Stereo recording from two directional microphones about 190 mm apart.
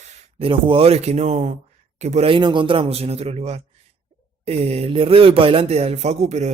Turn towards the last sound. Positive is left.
turn(degrees=-35)  # may be behind; listen again after turning